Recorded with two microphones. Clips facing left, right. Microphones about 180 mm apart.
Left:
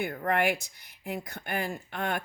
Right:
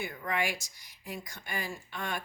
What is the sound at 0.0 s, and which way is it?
Speech, 55° left (ahead or behind).